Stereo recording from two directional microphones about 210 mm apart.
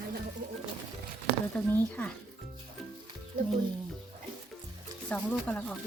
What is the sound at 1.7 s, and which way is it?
Speech, 5° left (ahead or behind).